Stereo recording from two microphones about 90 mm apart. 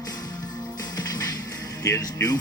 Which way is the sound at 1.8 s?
40° left (ahead or behind).